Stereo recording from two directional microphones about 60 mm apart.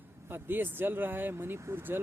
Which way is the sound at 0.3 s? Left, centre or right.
Right.